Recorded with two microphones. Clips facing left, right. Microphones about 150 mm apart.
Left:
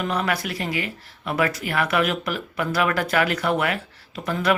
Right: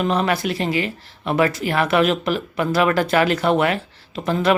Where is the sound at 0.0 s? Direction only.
25° right (ahead or behind).